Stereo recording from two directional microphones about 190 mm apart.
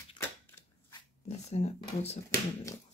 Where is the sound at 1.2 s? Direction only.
35° left (ahead or behind).